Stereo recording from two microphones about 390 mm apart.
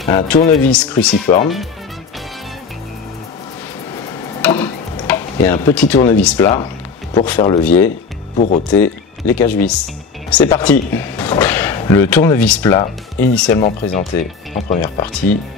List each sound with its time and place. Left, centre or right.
0.1 s speech: centre
0.7 s speech: centre
1.2 s speech: centre
3.9 s tick-tock: centre
7.2 s speech: centre
8.4 s speech: centre
8.7 s speech: centre
14.5 s speech: centre
15.3 s speech: centre